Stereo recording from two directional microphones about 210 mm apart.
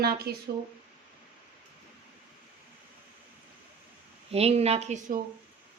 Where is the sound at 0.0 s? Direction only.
50° right (ahead or behind).